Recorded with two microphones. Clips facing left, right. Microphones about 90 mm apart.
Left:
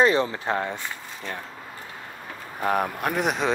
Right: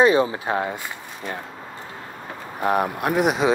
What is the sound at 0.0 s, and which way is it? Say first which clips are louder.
Speech: right 3 dB; 10° right (ahead or behind).